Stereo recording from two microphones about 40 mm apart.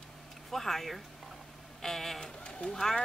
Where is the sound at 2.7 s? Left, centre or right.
Centre.